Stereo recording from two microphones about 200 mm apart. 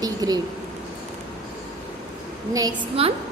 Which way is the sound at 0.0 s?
20° right (ahead or behind).